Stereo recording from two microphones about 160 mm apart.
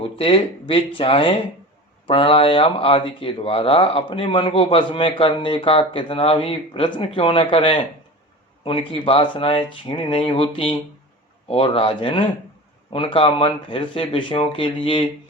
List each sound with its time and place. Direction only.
0.0 s a sound: 35° left (ahead or behind)
0.7 s speech: 35° left (ahead or behind)
8.9 s speech: 35° left (ahead or behind)